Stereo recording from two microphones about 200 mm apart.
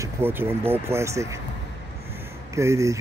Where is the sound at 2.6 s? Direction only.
15° right (ahead or behind).